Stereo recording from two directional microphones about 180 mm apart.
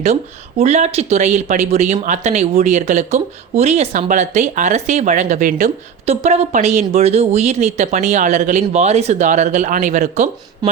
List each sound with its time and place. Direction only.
0.6 s speech: 40° right (ahead or behind)
6.1 s speech: 35° right (ahead or behind)
10.6 s speech: 20° right (ahead or behind)